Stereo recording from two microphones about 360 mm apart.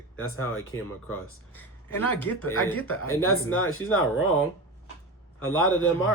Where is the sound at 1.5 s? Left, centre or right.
Centre.